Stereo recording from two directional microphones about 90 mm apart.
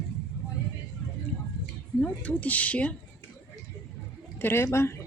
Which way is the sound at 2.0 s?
15° left (ahead or behind).